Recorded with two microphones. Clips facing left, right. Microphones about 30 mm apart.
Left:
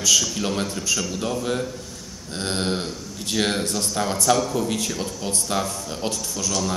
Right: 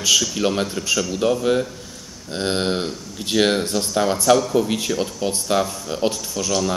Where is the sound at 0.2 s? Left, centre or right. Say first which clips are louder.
Right 4 dB; centre.